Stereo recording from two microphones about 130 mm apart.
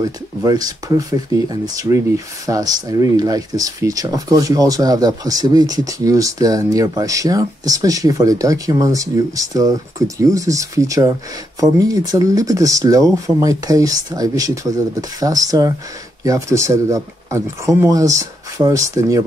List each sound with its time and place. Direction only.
0.0 s speech: 30° right (ahead or behind)